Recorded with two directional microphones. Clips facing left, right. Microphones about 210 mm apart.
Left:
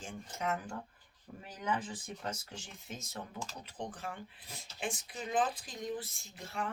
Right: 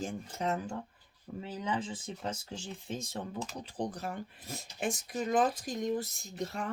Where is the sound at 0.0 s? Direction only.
35° right (ahead or behind).